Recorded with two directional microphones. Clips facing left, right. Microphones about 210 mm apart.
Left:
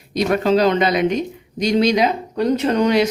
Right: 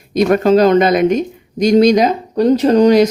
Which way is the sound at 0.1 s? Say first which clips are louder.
Right 6 dB; 50° right (ahead or behind).